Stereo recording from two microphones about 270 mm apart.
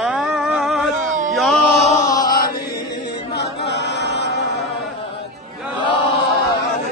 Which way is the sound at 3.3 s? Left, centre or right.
Left.